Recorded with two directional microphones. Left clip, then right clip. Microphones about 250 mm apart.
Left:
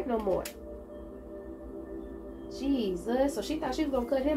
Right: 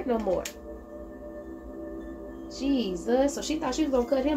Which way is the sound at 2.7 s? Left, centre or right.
Right.